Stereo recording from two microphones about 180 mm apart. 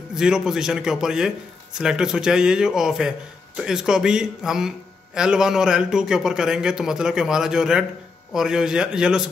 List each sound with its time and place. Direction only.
0.1 s speech: 5° right (ahead or behind)